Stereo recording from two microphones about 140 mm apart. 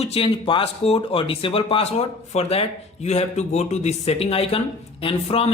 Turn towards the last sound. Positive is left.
turn(degrees=40)  # may be behind; listen again after turning